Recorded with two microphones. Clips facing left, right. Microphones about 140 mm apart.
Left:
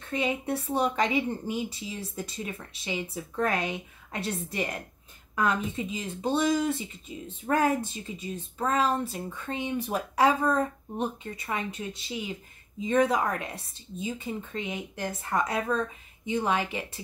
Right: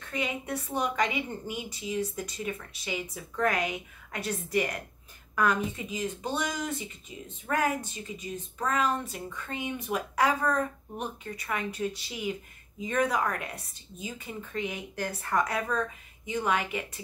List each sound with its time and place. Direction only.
0.0 s speech: 25° left (ahead or behind)